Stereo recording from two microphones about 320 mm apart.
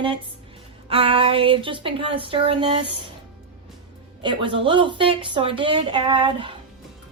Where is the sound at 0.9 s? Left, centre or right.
Centre.